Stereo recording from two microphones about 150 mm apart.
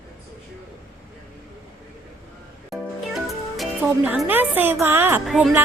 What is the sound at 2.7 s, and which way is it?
Music, centre (ahead or behind).